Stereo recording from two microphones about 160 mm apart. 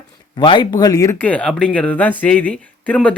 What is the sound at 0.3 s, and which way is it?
Speech, 30° left (ahead or behind).